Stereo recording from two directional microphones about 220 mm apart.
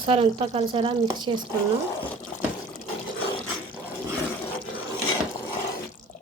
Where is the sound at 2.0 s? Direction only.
5° left (ahead or behind).